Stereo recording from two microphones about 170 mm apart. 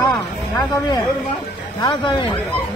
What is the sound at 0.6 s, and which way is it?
Speech, 25° left (ahead or behind).